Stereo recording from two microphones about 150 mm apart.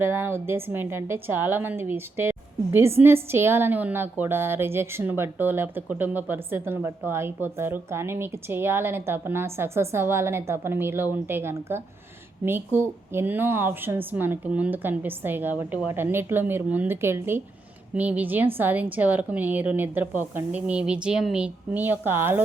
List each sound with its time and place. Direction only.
0.0 s a woman's voice: 15° right (ahead or behind)